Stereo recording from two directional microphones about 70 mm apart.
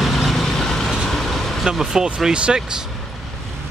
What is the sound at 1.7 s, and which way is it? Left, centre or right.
Speech, centre.